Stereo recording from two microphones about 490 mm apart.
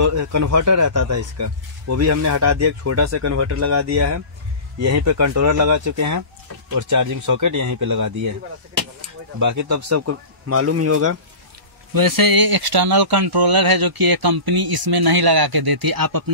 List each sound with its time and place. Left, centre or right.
0.0 s speech: right
11.9 s speech: right